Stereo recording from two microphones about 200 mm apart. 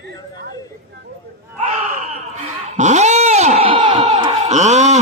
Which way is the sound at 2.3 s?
35° right (ahead or behind).